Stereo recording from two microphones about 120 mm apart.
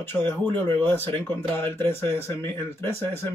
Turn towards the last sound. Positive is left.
turn(degrees=20)  # may be behind; listen again after turning